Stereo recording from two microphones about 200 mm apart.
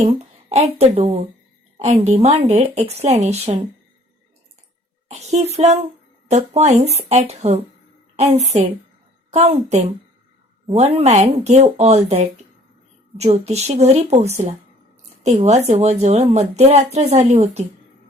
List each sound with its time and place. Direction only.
0.5 s speech: 30° right (ahead or behind)
5.0 s a woman's voice: 35° right (ahead or behind)